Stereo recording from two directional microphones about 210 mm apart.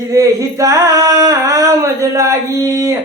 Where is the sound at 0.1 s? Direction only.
15° right (ahead or behind).